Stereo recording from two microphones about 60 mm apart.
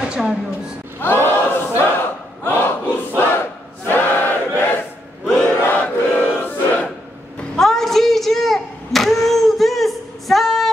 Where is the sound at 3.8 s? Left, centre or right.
Left.